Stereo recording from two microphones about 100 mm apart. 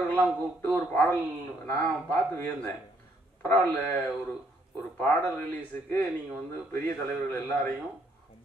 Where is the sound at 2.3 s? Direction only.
15° left (ahead or behind).